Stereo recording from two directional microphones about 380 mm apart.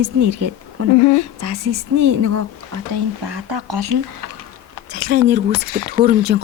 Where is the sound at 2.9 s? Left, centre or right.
Right.